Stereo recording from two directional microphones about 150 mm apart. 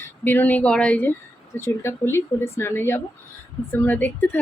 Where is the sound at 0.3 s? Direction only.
10° left (ahead or behind).